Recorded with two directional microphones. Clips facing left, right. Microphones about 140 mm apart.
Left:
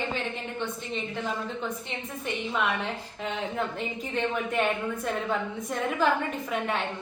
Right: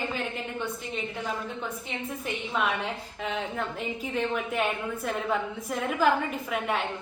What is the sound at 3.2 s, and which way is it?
A woman's voice, centre (ahead or behind).